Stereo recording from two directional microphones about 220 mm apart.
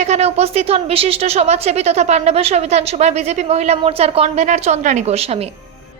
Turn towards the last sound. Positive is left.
turn(degrees=-30)  # may be behind; listen again after turning